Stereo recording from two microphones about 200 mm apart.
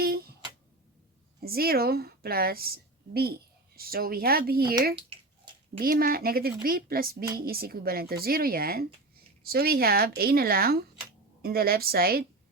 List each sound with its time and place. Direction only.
0.0 s music: 50° right (ahead or behind)
1.4 s a woman's voice: 50° right (ahead or behind)
5.7 s a woman's voice: 45° right (ahead or behind)